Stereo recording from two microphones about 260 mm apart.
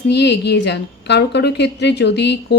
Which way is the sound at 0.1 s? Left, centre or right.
Left.